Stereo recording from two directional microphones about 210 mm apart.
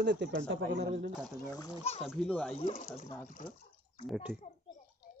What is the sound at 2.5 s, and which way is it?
Speech, 35° left (ahead or behind).